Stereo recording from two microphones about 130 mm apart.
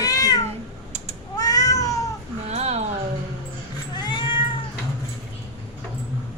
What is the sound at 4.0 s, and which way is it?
Cat, 35° left (ahead or behind).